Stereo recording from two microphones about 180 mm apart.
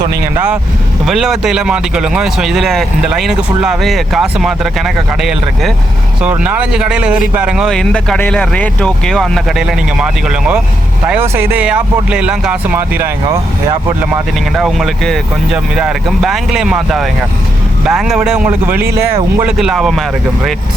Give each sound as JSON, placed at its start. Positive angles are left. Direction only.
{"t": 0.3, "sound": "speech", "side_deg": -5}
{"t": 18.7, "sound": "speech", "side_deg": -60}
{"t": 19.4, "sound": "speech", "side_deg": -5}